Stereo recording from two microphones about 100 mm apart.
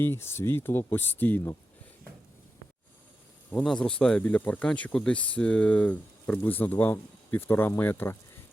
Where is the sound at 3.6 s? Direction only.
10° left (ahead or behind).